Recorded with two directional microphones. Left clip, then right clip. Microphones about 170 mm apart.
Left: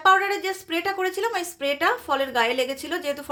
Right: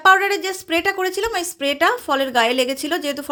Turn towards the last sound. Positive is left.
turn(degrees=-40)  # may be behind; listen again after turning